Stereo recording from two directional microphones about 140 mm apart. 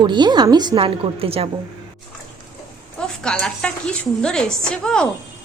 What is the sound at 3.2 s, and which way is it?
A woman's voice, 5° left (ahead or behind).